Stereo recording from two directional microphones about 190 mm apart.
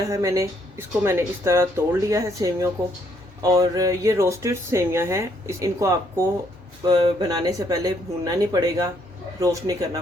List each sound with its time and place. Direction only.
0.1 s speech: 15° right (ahead or behind)